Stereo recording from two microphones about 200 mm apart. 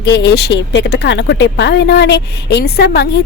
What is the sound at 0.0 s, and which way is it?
Speech, 60° left (ahead or behind).